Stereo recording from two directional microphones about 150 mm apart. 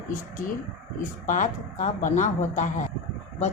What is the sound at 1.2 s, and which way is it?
A woman's voice, 60° left (ahead or behind).